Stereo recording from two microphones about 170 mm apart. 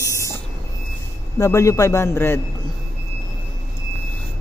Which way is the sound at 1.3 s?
15° left (ahead or behind).